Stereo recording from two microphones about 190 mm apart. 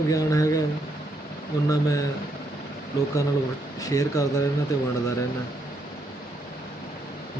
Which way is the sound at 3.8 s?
15° left (ahead or behind).